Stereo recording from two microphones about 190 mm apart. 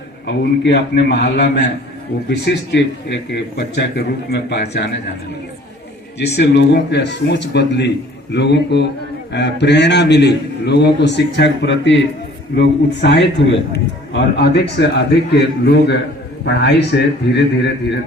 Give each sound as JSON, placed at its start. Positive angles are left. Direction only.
{"t": 0.3, "sound": "speech", "side_deg": 65}
{"t": 6.1, "sound": "a man's voice", "side_deg": 65}